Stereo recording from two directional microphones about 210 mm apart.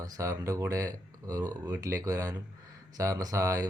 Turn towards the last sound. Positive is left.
turn(degrees=-15)  # may be behind; listen again after turning